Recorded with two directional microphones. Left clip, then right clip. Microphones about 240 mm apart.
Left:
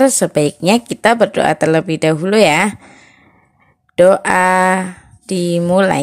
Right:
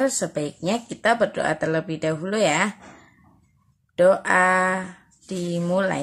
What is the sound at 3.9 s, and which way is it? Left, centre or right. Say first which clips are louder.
Speech: left 7 dB; left.